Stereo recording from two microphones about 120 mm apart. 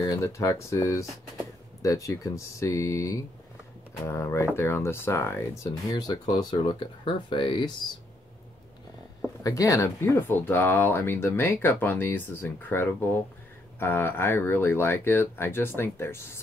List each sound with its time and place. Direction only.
0.0 s speech: 25° left (ahead or behind); by 7.7 s 40° left (ahead or behind)
9.4 s speech: 30° left (ahead or behind)